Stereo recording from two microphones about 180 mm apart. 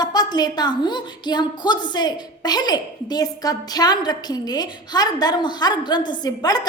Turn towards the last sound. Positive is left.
turn(degrees=20)  # may be behind; listen again after turning